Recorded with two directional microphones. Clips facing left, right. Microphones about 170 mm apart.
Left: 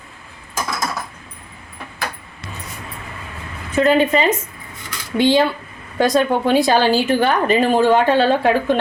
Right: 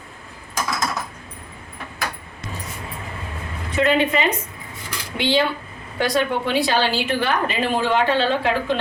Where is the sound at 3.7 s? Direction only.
40° left (ahead or behind).